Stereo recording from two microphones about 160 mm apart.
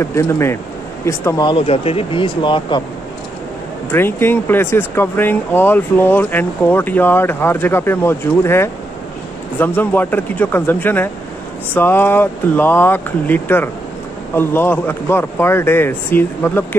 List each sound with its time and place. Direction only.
0.0 s speech: 15° left (ahead or behind)
3.9 s speech: 15° left (ahead or behind)